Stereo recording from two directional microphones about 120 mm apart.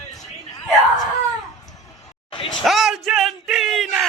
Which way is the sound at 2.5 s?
Centre (ahead or behind).